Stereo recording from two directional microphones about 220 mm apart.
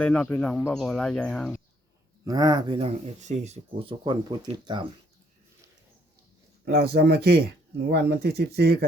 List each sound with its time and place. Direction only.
0.0 s speech: 5° left (ahead or behind)
2.2 s speech: 15° right (ahead or behind)
6.7 s speech: 45° right (ahead or behind)